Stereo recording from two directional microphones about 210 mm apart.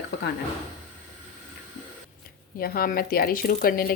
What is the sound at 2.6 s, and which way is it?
A woman's voice, 45° left (ahead or behind).